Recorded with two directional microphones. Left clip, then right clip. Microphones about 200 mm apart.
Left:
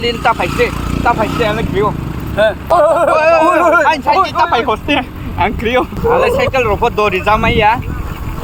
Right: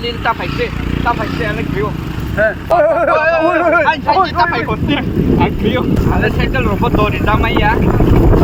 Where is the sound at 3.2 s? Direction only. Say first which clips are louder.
Left 3 dB; 40° left (ahead or behind).